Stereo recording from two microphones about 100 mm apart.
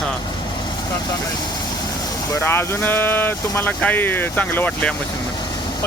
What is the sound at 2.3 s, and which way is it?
Speech, 25° left (ahead or behind).